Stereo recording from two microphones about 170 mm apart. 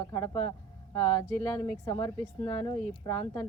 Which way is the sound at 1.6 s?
20° left (ahead or behind).